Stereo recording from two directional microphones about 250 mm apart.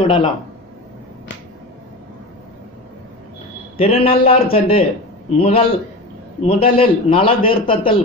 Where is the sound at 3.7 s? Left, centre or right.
Left.